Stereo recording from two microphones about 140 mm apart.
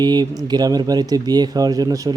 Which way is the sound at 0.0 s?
30° right (ahead or behind).